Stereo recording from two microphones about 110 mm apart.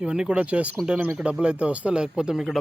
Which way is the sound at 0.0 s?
10° right (ahead or behind).